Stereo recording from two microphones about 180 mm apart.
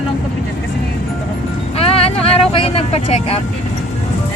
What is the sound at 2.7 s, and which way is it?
Speech, 35° left (ahead or behind).